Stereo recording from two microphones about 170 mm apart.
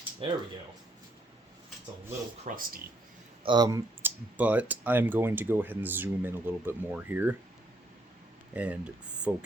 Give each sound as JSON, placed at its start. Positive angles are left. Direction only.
{"t": 0.2, "sound": "speech", "side_deg": -30}
{"t": 2.4, "sound": "speech", "side_deg": -55}
{"t": 3.4, "sound": "speech", "side_deg": -25}
{"t": 4.0, "sound": "speech", "side_deg": -10}
{"t": 8.5, "sound": "speech", "side_deg": -10}